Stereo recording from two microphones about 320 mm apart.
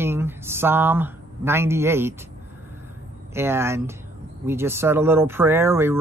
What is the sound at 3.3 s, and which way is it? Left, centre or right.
Speech, centre.